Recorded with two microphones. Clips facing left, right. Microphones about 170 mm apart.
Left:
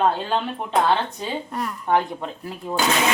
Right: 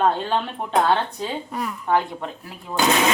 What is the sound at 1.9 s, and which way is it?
Speech, 15° left (ahead or behind).